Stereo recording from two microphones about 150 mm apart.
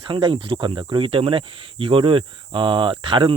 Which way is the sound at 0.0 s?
35° right (ahead or behind).